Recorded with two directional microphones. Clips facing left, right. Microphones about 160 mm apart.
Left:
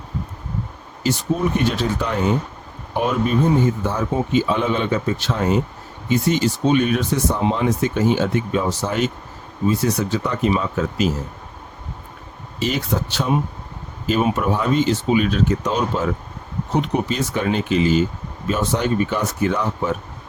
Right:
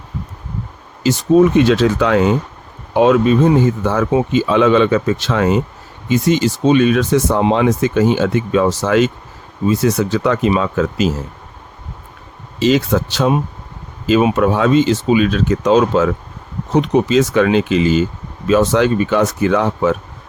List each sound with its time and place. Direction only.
1.0 s speech: 90° right
12.5 s speech: 90° right